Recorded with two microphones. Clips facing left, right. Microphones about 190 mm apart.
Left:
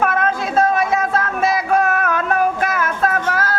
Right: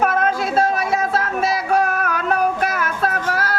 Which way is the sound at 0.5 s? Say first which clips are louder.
Left 6 dB; 50° left (ahead or behind).